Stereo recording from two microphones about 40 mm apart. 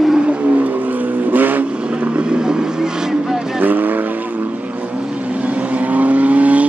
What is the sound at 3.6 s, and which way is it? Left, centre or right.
Vehicle, right.